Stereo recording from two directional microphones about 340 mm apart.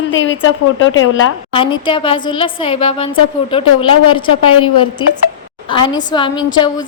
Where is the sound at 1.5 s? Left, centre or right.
Centre.